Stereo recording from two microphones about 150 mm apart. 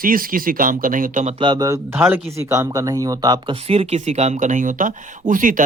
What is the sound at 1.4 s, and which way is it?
A man's voice, 30° right (ahead or behind).